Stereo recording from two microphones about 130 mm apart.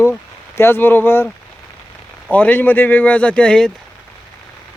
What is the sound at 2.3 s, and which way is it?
Speech, 10° left (ahead or behind).